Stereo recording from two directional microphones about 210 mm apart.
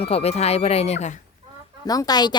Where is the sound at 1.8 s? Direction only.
20° left (ahead or behind).